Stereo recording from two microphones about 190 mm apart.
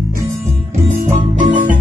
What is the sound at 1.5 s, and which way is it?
Music, 45° right (ahead or behind).